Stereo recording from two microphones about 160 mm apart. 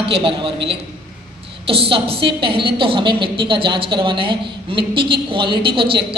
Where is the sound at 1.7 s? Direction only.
35° right (ahead or behind).